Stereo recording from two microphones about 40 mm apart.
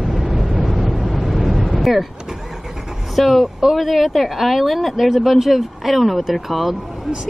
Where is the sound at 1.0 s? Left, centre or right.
Centre.